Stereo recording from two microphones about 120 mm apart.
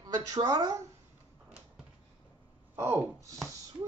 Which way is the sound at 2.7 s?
25° right (ahead or behind).